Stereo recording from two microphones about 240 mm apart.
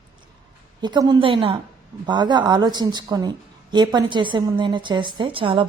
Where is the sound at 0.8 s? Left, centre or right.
Centre.